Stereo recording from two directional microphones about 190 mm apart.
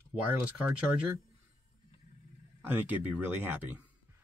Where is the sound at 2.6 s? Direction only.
10° right (ahead or behind).